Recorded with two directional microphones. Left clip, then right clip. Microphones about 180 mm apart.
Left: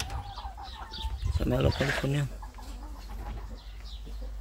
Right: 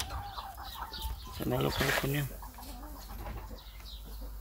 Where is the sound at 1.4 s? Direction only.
30° left (ahead or behind).